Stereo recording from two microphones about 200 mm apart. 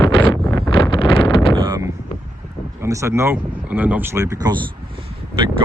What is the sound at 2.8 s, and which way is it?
Speech, 15° right (ahead or behind).